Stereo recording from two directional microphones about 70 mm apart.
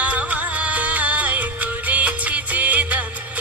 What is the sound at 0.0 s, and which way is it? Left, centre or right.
Music, centre.